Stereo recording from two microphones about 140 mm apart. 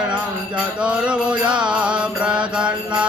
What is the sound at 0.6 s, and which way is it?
Mantra, 10° right (ahead or behind).